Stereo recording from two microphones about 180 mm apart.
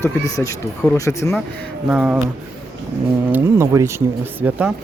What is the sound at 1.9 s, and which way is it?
Speech, 5° right (ahead or behind).